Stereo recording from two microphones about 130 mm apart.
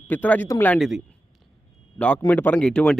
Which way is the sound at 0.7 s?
Centre (ahead or behind).